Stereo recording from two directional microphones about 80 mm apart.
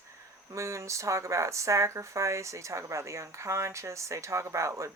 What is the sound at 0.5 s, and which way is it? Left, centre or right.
Speech, right.